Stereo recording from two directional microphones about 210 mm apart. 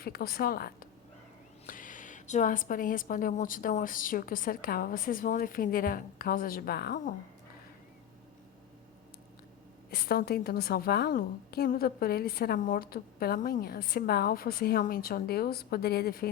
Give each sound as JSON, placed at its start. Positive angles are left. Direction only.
{"t": 0.0, "sound": "a woman's voice", "side_deg": 45}
{"t": 9.9, "sound": "a woman's voice", "side_deg": 45}